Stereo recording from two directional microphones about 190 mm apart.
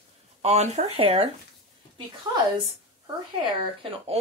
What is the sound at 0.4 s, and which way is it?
Speech, 35° right (ahead or behind).